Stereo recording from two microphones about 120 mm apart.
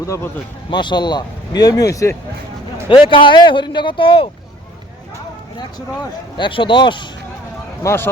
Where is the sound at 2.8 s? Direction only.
45° left (ahead or behind).